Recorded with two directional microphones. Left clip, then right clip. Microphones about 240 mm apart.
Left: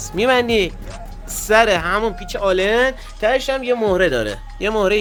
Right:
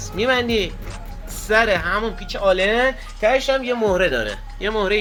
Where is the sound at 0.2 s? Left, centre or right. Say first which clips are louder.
Left 3 dB; left.